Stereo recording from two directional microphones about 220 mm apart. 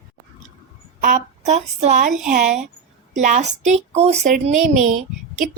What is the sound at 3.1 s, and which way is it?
A woman's voice, 35° right (ahead or behind).